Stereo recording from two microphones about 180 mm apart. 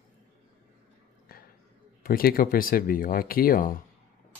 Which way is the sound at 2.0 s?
55° left (ahead or behind).